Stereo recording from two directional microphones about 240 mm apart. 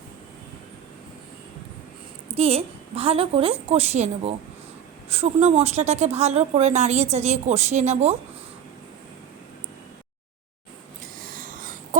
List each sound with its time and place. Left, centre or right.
2.3 s speech: right
11.2 s wheeze: right